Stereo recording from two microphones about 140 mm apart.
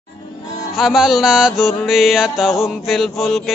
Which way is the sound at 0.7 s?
5° right (ahead or behind).